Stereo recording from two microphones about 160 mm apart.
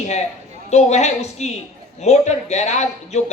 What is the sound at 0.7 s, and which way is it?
A man's voice, 45° left (ahead or behind).